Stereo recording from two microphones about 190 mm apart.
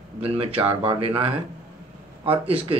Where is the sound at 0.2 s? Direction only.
30° right (ahead or behind).